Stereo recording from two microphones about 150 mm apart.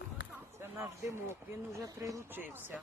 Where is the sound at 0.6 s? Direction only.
20° right (ahead or behind).